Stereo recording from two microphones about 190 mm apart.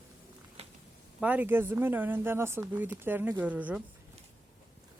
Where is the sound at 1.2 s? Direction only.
10° right (ahead or behind).